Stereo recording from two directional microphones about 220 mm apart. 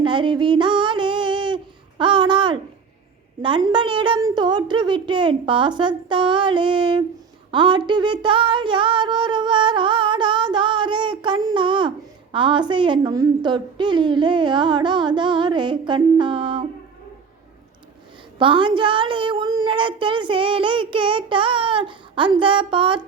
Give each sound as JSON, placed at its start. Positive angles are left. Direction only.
{"t": 0.0, "sound": "female singing", "side_deg": -20}
{"t": 3.4, "sound": "a woman's voice", "side_deg": -20}
{"t": 7.5, "sound": "a sound", "side_deg": -20}
{"t": 12.3, "sound": "a woman's voice", "side_deg": -20}
{"t": 18.3, "sound": "a woman's voice", "side_deg": -20}